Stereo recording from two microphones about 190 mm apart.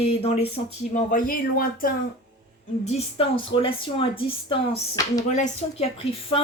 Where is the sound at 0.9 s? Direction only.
45° left (ahead or behind).